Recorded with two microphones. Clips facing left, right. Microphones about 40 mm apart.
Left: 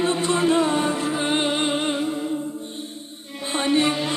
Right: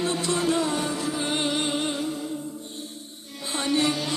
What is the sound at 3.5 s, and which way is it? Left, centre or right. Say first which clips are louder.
Music: left 4 dB; left.